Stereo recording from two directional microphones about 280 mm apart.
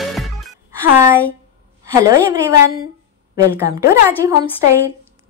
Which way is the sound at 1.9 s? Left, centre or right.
Centre.